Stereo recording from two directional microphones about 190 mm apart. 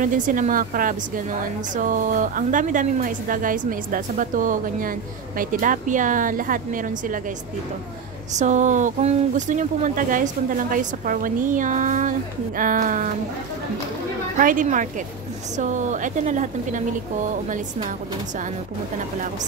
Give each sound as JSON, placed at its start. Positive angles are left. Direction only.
{"t": 0.0, "sound": "speech", "side_deg": -45}
{"t": 8.4, "sound": "speech", "side_deg": -40}
{"t": 14.3, "sound": "a woman's voice", "side_deg": -45}